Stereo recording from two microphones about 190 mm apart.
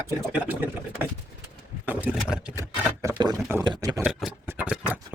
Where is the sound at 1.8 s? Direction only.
10° right (ahead or behind).